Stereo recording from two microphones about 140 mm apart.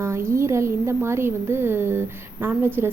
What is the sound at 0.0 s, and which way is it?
A woman's voice, 20° right (ahead or behind).